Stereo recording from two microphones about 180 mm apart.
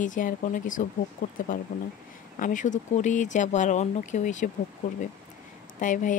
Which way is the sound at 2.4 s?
45° left (ahead or behind).